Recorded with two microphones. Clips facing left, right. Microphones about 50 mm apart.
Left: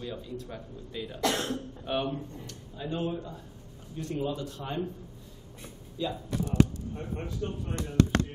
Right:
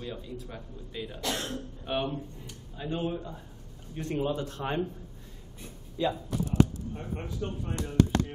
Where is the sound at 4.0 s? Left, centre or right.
Right.